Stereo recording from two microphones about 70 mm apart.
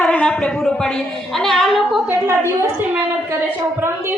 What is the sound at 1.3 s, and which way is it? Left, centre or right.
Speech, centre.